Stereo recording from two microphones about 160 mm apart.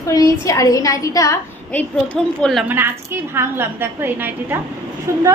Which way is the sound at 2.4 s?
Centre (ahead or behind).